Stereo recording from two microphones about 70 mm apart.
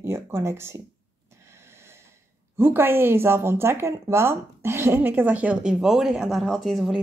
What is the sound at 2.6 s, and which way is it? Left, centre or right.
Speech, right.